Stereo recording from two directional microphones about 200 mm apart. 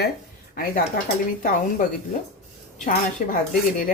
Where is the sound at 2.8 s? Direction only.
45° left (ahead or behind).